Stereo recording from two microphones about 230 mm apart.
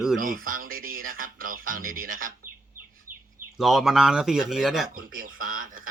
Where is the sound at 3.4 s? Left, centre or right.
Centre.